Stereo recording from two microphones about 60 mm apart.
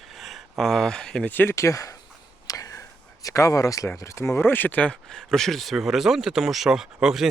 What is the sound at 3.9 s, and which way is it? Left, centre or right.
Speech, left.